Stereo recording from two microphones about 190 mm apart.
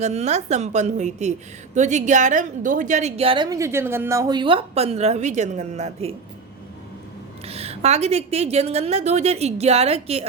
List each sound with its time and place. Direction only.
0.0 s a woman's voice: 35° right (ahead or behind)
7.4 s a woman's voice: 30° right (ahead or behind)